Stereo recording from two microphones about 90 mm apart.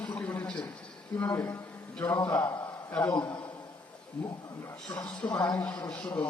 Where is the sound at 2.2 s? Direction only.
35° left (ahead or behind).